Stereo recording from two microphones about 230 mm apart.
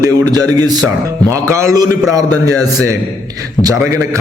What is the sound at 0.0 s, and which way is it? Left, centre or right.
A man's voice, centre.